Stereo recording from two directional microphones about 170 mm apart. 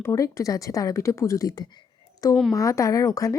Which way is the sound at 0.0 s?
20° left (ahead or behind).